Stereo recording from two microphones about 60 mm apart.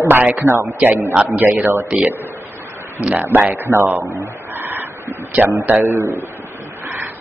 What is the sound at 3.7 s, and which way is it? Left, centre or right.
Speech, right.